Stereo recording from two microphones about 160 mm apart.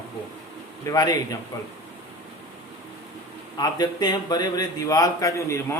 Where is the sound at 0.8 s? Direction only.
20° left (ahead or behind).